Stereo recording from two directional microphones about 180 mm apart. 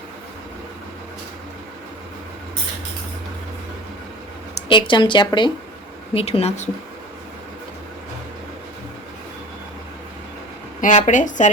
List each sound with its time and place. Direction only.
4.5 s speech: 25° left (ahead or behind)
10.8 s a woman's voice: 45° left (ahead or behind)